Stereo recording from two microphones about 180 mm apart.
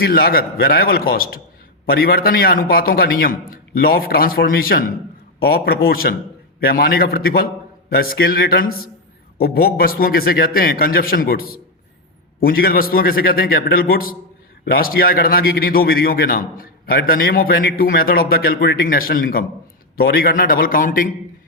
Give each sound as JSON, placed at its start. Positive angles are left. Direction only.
{"t": 0.0, "sound": "a man's voice", "side_deg": 55}